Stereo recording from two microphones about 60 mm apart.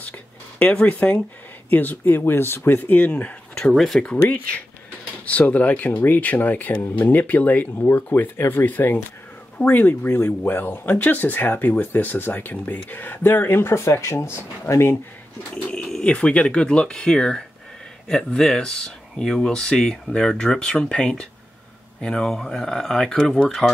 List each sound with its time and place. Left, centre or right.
0.8 s speech: left
3.7 s speech: centre
4.0 s speech: centre; by 15.0 s left
15.5 s bird: centre
16.0 s speech: left